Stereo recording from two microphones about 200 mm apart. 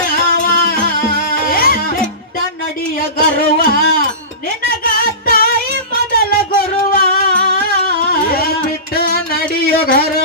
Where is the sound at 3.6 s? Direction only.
50° left (ahead or behind).